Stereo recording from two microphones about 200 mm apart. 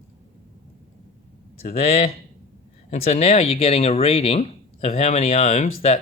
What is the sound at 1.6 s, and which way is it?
Speech, 30° left (ahead or behind).